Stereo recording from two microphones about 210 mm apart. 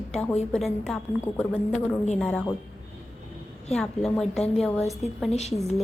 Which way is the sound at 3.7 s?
Centre (ahead or behind).